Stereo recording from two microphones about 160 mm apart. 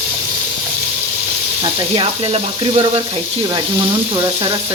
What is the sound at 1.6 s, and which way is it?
Speech, 40° right (ahead or behind).